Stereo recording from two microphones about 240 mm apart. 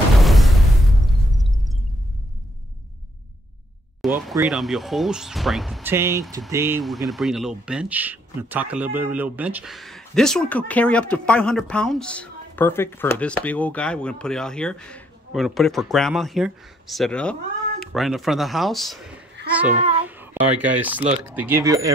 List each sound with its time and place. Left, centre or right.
0.2 s a sound: centre
4.0 s a sound: centre
4.5 s speech: centre
5.9 s speech: centre
6.8 s speech: centre
19.7 s a child's voice: right
20.1 s speech: centre